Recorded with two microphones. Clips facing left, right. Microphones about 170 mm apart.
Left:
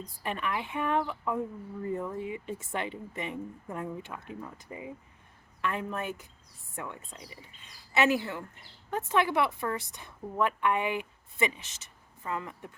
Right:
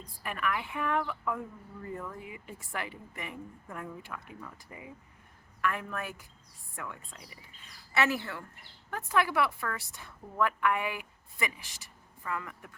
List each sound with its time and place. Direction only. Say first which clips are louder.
0.2 s speech: left 1 dB; 25° left (ahead or behind)